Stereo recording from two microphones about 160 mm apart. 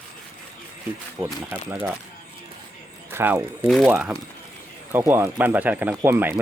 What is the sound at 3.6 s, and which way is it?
Speech, centre (ahead or behind).